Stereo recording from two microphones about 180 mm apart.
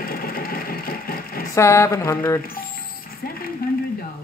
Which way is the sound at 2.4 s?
55° left (ahead or behind).